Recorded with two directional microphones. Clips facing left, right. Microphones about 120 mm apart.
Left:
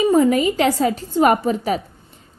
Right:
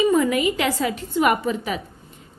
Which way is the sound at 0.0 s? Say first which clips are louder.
Left 3 dB; 35° left (ahead or behind).